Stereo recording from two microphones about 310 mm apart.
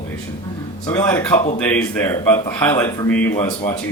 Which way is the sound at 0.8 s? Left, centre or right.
Centre.